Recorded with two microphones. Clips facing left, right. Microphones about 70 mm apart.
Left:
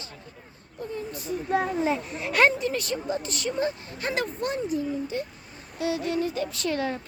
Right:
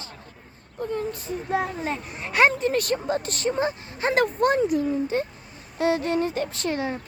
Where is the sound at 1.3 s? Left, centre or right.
Right.